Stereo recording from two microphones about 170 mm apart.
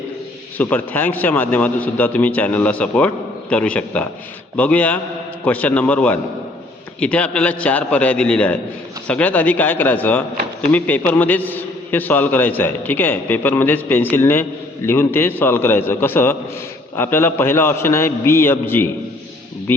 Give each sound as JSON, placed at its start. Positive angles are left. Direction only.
{"t": 0.5, "sound": "a man's voice", "side_deg": 10}